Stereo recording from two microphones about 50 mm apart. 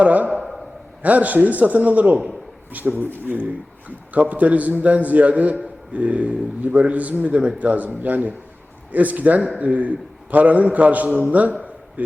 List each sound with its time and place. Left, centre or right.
0.0 s a man's voice: right
0.4 s a sound: centre
1.0 s a man's voice: right